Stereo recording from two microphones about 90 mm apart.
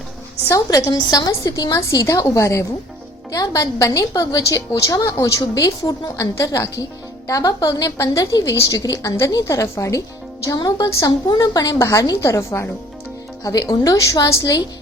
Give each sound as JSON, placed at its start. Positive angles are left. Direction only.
{"t": 0.4, "sound": "a woman's voice", "side_deg": 35}